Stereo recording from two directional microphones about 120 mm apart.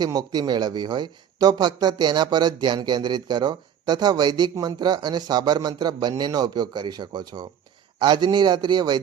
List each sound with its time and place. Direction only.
0.0 s a man's voice: 35° right (ahead or behind)